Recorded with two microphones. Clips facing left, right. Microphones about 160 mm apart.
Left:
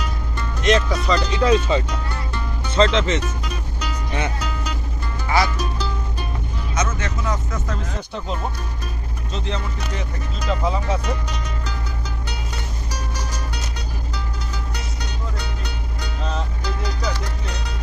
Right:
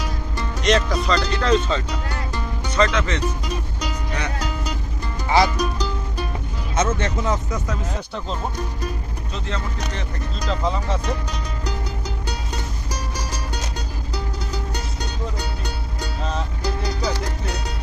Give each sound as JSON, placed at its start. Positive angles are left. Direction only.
{"t": 0.6, "sound": "speech", "side_deg": 0}
{"t": 2.7, "sound": "speech", "side_deg": 25}
{"t": 5.3, "sound": "speech", "side_deg": -20}
{"t": 6.7, "sound": "speech", "side_deg": -30}
{"t": 7.5, "sound": "speech", "side_deg": -10}
{"t": 9.3, "sound": "speech", "side_deg": 20}
{"t": 10.4, "sound": "speech", "side_deg": 5}